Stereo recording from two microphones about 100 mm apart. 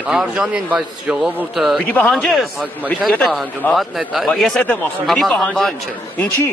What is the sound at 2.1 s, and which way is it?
Speech, centre (ahead or behind).